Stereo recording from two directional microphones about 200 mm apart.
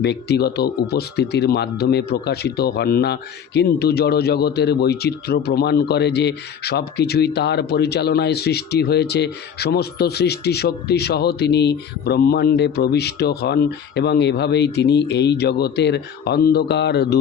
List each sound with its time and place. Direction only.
0.0 s speech: 55° left (ahead or behind)